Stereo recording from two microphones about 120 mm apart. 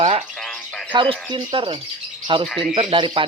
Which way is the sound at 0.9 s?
40° right (ahead or behind).